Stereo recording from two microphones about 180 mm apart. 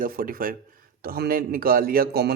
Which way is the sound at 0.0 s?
55° right (ahead or behind).